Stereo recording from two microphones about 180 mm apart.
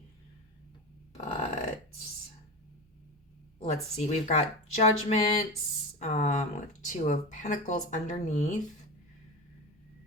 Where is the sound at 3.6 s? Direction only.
40° left (ahead or behind).